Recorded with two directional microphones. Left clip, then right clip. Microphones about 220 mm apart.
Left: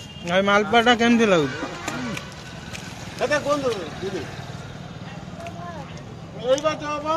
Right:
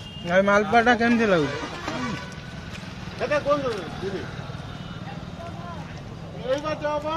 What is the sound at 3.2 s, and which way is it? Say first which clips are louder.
Speech: left 1 dB; 50° left (ahead or behind).